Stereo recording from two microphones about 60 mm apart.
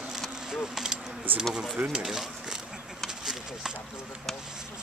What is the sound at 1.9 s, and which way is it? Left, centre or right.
Speech, centre.